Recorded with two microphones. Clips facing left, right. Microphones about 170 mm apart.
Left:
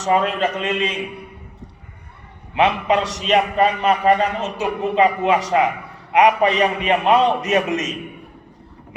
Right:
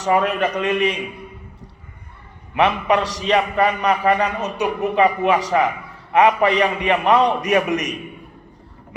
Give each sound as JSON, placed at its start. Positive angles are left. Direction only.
{"t": 0.0, "sound": "a man's voice", "side_deg": 25}
{"t": 2.6, "sound": "a man's voice", "side_deg": 20}